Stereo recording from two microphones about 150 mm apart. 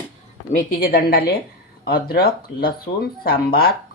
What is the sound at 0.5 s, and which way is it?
A woman's voice, 65° left (ahead or behind).